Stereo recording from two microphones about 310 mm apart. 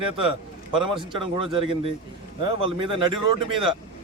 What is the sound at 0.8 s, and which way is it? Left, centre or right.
A man's voice, centre.